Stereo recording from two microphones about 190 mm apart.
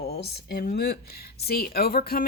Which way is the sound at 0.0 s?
60° left (ahead or behind).